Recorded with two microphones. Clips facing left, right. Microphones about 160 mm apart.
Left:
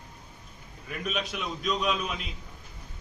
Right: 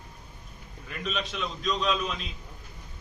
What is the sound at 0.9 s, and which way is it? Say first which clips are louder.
A man's voice: left 1 dB; 10° left (ahead or behind).